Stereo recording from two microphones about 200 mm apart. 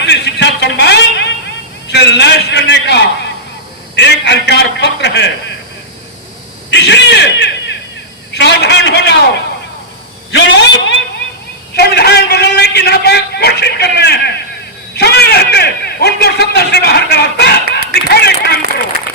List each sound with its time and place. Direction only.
0.0 s a sound: 60° left (ahead or behind)
1.9 s a man's voice: 60° left (ahead or behind)
6.7 s a man's voice: 60° left (ahead or behind)
10.3 s a man's voice: 60° left (ahead or behind)